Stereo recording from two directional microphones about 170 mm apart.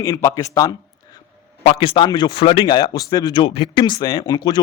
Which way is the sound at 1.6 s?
30° left (ahead or behind).